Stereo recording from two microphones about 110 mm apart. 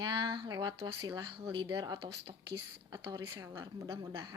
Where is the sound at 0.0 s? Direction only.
45° right (ahead or behind).